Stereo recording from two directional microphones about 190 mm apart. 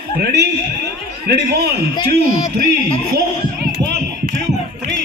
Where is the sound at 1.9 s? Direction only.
25° left (ahead or behind).